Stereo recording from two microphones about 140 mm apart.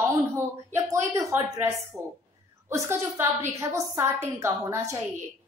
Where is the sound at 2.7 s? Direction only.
20° right (ahead or behind).